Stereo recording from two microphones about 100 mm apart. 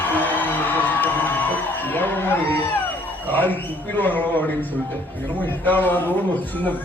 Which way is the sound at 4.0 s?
20° left (ahead or behind).